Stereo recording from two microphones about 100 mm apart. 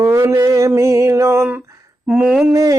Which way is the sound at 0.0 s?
30° right (ahead or behind).